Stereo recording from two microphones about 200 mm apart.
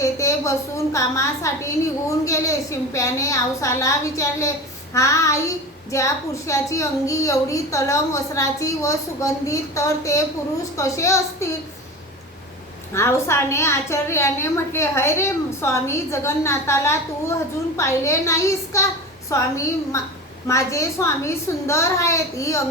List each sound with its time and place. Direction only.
0.0 s a sound: 15° left (ahead or behind)
0.9 s a woman's voice: 15° left (ahead or behind)
12.9 s a woman's voice: 15° left (ahead or behind)